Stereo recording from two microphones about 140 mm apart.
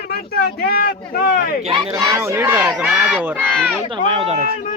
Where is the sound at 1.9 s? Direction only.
25° right (ahead or behind); by 2.9 s 5° right (ahead or behind).